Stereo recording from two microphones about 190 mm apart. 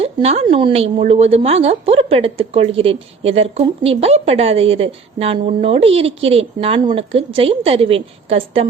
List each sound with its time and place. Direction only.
0.0 s a woman's voice: 35° right (ahead or behind)